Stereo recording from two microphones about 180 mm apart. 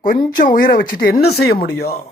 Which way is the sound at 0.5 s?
50° left (ahead or behind).